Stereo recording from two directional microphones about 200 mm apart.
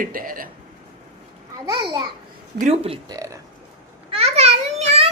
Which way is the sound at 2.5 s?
35° right (ahead or behind).